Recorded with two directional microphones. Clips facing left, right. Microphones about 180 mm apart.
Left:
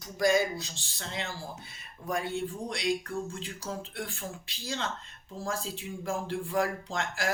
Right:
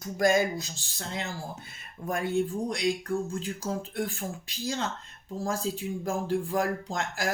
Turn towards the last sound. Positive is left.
turn(degrees=-40)  # may be behind; listen again after turning